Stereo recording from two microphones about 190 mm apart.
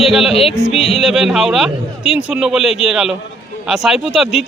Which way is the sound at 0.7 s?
35° left (ahead or behind).